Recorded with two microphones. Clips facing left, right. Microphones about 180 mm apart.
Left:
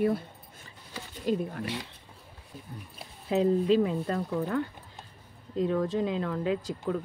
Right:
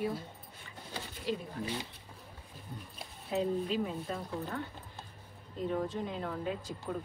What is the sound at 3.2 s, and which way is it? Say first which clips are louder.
Speech: left 8 dB; 90° left.